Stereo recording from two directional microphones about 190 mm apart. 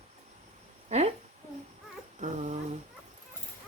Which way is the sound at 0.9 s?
35° right (ahead or behind).